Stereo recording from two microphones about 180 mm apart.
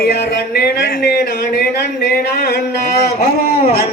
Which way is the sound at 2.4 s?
65° left (ahead or behind).